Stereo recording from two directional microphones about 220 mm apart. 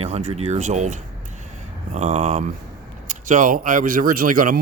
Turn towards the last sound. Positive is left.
turn(degrees=-40)  # may be behind; listen again after turning